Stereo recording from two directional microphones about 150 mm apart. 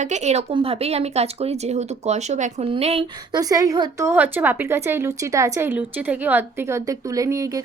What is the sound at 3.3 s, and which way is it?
A woman's voice, 25° right (ahead or behind).